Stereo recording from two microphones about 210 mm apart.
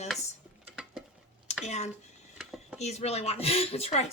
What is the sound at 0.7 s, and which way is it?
Stir, 5° right (ahead or behind).